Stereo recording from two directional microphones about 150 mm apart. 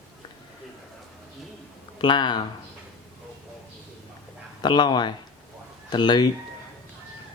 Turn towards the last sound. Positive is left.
turn(degrees=30)  # may be behind; listen again after turning